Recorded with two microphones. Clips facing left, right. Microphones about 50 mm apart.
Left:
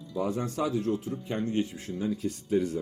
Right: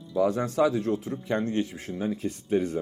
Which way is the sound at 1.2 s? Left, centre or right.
Right.